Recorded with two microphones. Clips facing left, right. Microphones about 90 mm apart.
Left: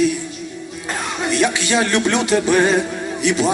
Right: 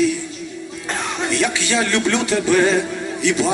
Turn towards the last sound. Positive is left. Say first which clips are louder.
# left 1 dB
turn(degrees=20)  # may be behind; listen again after turning